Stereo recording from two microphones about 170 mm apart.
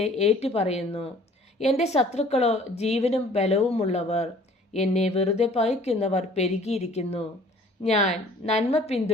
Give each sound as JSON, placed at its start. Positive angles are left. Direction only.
{"t": 0.0, "sound": "a woman's voice", "side_deg": 40}